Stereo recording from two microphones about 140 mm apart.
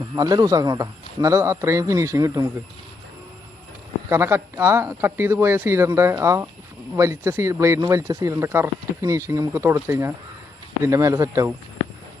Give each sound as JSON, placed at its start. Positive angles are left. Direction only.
{"t": 0.2, "sound": "speech", "side_deg": -25}
{"t": 4.1, "sound": "speech", "side_deg": -20}